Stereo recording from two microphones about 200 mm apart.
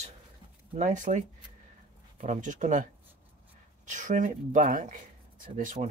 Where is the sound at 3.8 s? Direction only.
40° right (ahead or behind).